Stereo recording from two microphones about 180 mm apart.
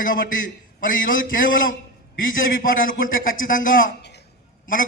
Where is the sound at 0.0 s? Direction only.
50° left (ahead or behind).